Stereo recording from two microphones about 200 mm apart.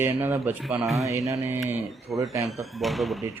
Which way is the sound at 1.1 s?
15° right (ahead or behind).